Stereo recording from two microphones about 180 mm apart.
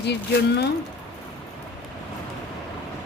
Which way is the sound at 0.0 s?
70° left (ahead or behind).